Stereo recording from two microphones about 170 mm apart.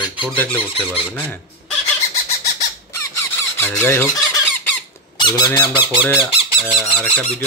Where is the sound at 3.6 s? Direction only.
15° left (ahead or behind).